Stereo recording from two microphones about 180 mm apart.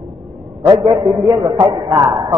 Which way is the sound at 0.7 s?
20° right (ahead or behind).